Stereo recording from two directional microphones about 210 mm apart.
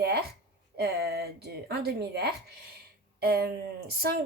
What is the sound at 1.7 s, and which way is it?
Speech, 50° right (ahead or behind).